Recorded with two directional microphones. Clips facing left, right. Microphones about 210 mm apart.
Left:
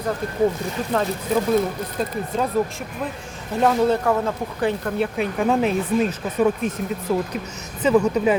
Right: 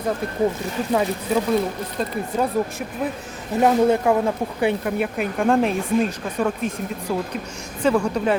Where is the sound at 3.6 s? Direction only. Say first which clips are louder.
Right 2 dB; 15° right (ahead or behind).